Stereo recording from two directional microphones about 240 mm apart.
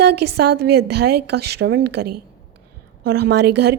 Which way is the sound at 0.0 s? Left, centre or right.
Right.